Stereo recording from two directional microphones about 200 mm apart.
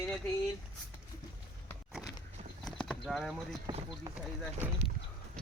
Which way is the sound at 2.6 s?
Centre (ahead or behind).